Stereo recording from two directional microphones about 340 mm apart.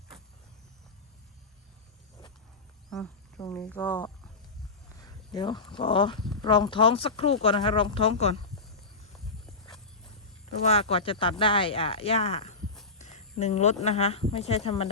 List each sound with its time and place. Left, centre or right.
2.9 s speech: centre
4.9 s a sound: centre
5.7 s speech: centre
6.1 s speech: centre
6.4 s speech: centre
10.7 s speech: centre
13.0 s a sound: left
13.8 s speech: centre